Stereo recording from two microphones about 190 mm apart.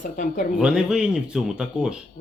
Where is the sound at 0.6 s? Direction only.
5° right (ahead or behind).